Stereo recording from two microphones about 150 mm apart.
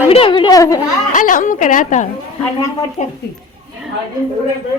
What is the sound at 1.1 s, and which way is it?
A woman's voice, 60° left (ahead or behind).